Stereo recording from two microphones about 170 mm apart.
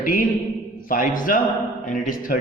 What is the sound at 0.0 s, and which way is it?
A man's voice, 55° left (ahead or behind).